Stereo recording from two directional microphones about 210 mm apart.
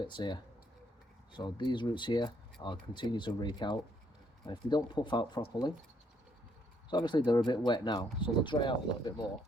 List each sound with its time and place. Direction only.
0.0 s speech: 20° left (ahead or behind)
6.9 s speech: 20° left (ahead or behind)